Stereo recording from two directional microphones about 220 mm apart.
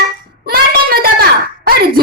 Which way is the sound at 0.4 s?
45° right (ahead or behind).